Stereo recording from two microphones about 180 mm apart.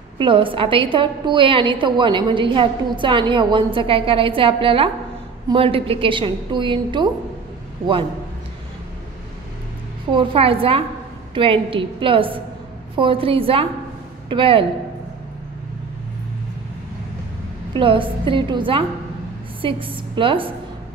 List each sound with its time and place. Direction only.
0.2 s a woman's voice: 30° right (ahead or behind)
10.1 s a woman's voice: 30° right (ahead or behind)
17.7 s a woman's voice: 30° right (ahead or behind)